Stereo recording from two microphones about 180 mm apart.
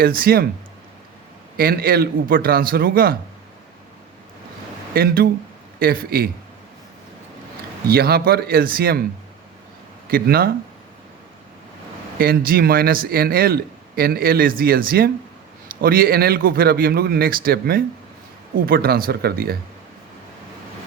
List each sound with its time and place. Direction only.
0.0 s a man's voice: 55° right (ahead or behind)
1.5 s a man's voice: 55° right (ahead or behind)
4.9 s a man's voice: 55° right (ahead or behind)
7.9 s a man's voice: 60° right (ahead or behind)
10.1 s a man's voice: 55° right (ahead or behind)
12.2 s a man's voice: 55° right (ahead or behind)